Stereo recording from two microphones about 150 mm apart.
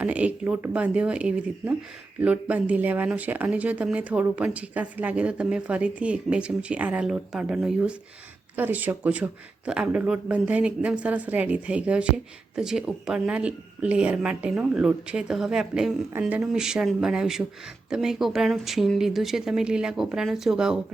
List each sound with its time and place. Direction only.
0.0 s speech: 10° right (ahead or behind)
16.1 s speech: 15° right (ahead or behind)
16.5 s speech: 5° right (ahead or behind)